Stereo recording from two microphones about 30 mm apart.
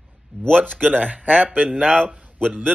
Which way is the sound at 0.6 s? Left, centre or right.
Right.